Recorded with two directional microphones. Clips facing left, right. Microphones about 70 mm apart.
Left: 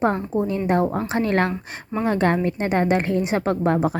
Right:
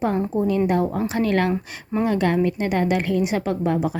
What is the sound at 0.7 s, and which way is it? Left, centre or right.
A woman's voice, left.